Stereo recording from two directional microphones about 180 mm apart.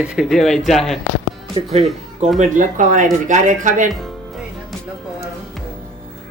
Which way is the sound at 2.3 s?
45° right (ahead or behind).